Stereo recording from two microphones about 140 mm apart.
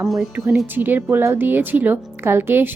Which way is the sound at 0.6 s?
15° right (ahead or behind).